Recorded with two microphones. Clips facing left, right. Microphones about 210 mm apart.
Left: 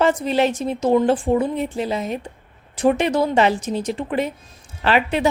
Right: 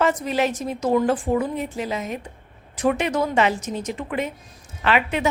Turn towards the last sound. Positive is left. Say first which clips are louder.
# left 3 dB
turn(degrees=35)  # may be behind; listen again after turning